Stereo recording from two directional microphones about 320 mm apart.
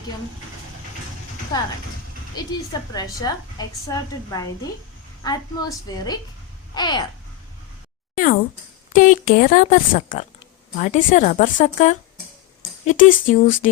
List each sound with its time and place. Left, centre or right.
1.5 s a woman's voice: centre
8.1 s a woman's voice: left